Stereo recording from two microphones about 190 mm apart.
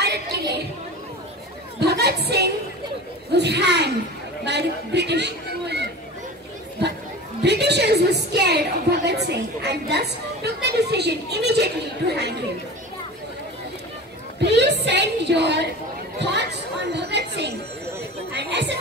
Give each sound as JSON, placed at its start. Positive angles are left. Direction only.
{"t": 0.0, "sound": "chatter", "side_deg": -60}
{"t": 1.8, "sound": "a sound", "side_deg": -60}
{"t": 3.3, "sound": "a woman's voice", "side_deg": -65}
{"t": 7.4, "sound": "a woman's voice", "side_deg": -60}
{"t": 14.4, "sound": "a woman's voice", "side_deg": -65}
{"t": 18.3, "sound": "a sound", "side_deg": -65}